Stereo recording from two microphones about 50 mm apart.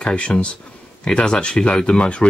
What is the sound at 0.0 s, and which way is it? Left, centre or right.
Speech, left.